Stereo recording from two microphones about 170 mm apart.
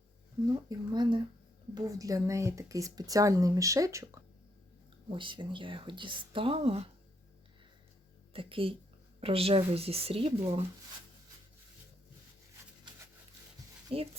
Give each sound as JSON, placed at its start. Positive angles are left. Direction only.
{"t": 0.4, "sound": "speech", "side_deg": -25}
{"t": 5.0, "sound": "speech", "side_deg": -30}
{"t": 8.3, "sound": "speech", "side_deg": -30}
{"t": 13.9, "sound": "speech", "side_deg": -35}